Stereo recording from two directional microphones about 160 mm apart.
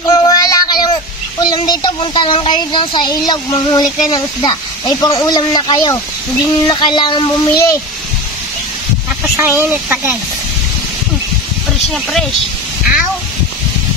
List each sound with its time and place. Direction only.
0.0 s child singing: 25° left (ahead or behind)
1.4 s speech: 25° left (ahead or behind)
9.4 s speech: 15° right (ahead or behind)
11.9 s speech: centre (ahead or behind)